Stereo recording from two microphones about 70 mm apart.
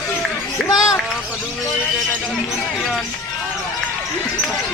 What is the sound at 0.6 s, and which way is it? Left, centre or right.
Speech, centre.